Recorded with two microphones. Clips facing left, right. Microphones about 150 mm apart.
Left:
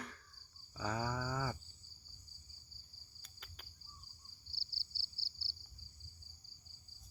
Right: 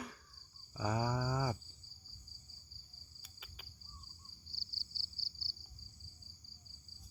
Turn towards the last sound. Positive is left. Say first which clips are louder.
# right 2 dB
turn(degrees=-45)  # may be behind; listen again after turning